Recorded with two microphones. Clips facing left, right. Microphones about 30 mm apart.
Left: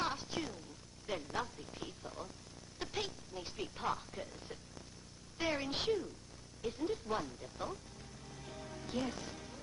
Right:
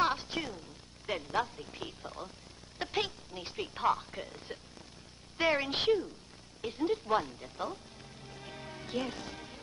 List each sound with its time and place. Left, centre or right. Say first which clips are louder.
0.0 s a sound: right 7 dB; right
1.0 s speech: right 6 dB; right
8.0 s music: right 3 dB; right